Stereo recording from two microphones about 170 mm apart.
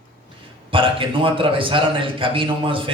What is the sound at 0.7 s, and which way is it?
A man's voice, 30° right (ahead or behind).